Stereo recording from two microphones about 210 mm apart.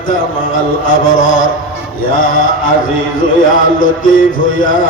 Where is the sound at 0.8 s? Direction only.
40° left (ahead or behind).